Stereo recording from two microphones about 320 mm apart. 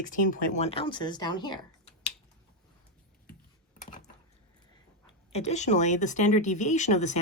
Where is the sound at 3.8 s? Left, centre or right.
Left.